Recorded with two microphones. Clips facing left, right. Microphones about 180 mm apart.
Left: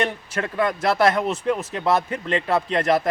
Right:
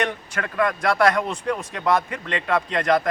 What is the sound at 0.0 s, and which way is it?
Speech, 25° left (ahead or behind).